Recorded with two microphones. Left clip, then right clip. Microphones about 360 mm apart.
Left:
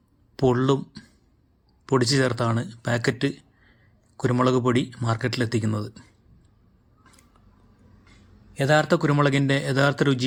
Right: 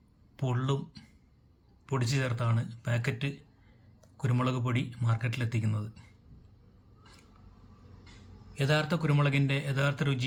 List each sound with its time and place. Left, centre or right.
0.3 s a man's voice: centre
2.0 s a man's voice: centre
8.5 s a man's voice: centre